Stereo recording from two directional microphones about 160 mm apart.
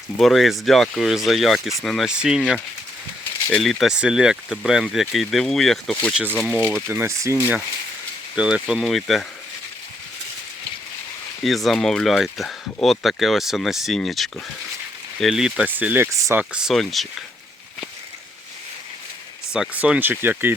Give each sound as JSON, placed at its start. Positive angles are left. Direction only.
{"t": 0.2, "sound": "speech", "side_deg": 0}
{"t": 6.8, "sound": "speech", "side_deg": -15}
{"t": 11.4, "sound": "speech", "side_deg": 0}
{"t": 19.5, "sound": "speech", "side_deg": -5}